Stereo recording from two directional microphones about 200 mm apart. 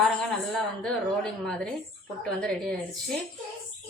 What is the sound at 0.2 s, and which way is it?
A woman's voice, 5° left (ahead or behind).